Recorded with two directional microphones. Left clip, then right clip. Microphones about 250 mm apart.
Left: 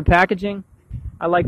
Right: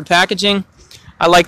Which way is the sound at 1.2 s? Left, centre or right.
Centre.